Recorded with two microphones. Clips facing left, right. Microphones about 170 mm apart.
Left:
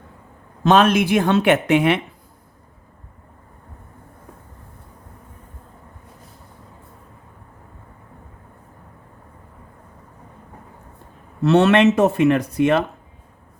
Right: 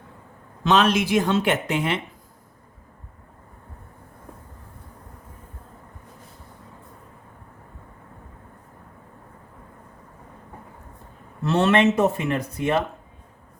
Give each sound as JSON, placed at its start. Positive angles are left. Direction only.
{"t": 0.6, "sound": "speech", "side_deg": 50}
{"t": 11.4, "sound": "speech", "side_deg": 75}